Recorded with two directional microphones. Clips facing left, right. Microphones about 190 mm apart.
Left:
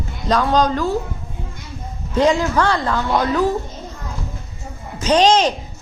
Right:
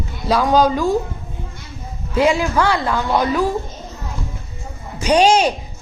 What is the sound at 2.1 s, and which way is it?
A woman's voice, 10° right (ahead or behind).